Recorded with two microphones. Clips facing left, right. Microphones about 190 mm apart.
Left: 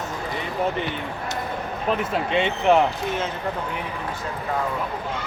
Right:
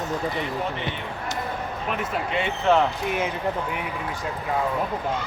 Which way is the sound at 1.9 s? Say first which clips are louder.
Left 6 dB; 35° left (ahead or behind).